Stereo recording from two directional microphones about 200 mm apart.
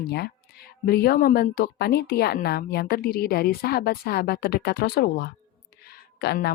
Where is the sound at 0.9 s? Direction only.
50° left (ahead or behind).